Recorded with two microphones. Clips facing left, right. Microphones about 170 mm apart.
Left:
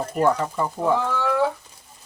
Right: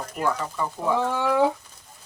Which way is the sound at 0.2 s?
40° left (ahead or behind).